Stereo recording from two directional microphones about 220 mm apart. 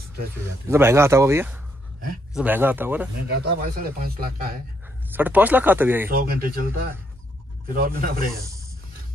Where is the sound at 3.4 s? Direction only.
40° right (ahead or behind).